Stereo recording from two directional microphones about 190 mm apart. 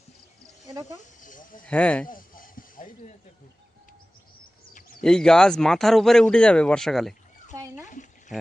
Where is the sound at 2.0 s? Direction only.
45° left (ahead or behind).